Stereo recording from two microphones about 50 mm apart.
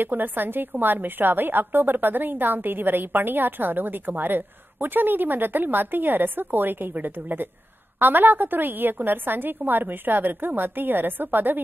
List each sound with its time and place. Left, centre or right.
0.0 s a woman's voice: right